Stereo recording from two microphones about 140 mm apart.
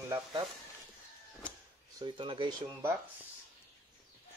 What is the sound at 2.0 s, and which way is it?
Speech, 35° right (ahead or behind).